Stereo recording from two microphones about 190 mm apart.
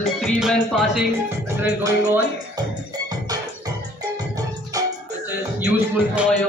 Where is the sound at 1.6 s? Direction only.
15° right (ahead or behind).